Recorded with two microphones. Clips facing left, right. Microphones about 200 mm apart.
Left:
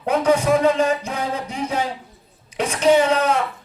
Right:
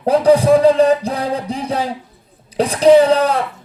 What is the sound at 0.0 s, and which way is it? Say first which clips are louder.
A man's voice: right 6 dB; 35° right (ahead or behind).